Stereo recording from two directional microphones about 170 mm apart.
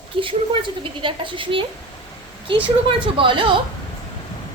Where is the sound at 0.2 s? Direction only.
30° right (ahead or behind).